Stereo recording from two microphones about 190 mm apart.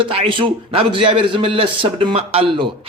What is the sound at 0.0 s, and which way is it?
A man's voice, 30° right (ahead or behind).